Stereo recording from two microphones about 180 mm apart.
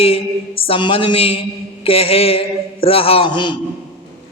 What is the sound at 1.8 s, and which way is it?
A man's voice, 30° left (ahead or behind).